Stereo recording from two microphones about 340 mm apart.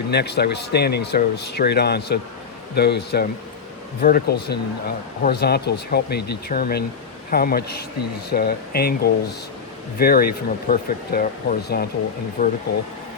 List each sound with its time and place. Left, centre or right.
0.1 s speech: left